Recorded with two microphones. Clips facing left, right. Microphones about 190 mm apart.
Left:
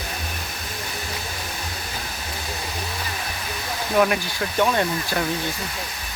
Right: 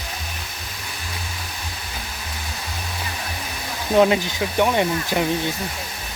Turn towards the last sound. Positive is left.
turn(degrees=-15)  # may be behind; listen again after turning